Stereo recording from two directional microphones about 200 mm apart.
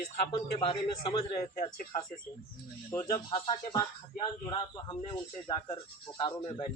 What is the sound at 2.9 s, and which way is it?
Speech, 15° left (ahead or behind).